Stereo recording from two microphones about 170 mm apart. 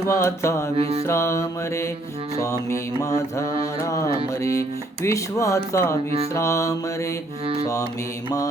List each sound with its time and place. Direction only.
0.1 s mantra: 15° left (ahead or behind)
0.8 s music: 35° right (ahead or behind)
1.0 s mantra: 15° left (ahead or behind)
7.4 s music: 35° right (ahead or behind)